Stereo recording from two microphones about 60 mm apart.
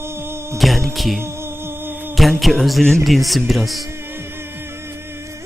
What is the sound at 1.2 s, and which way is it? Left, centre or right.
Humming, right.